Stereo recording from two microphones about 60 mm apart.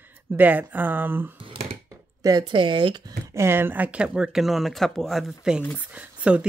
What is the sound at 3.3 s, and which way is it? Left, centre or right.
Speech, right.